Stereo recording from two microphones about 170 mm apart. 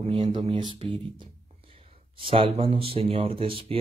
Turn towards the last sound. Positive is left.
turn(degrees=-30)  # may be behind; listen again after turning